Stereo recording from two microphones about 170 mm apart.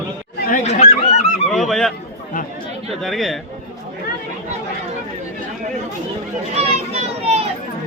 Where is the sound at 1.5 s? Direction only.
Centre (ahead or behind).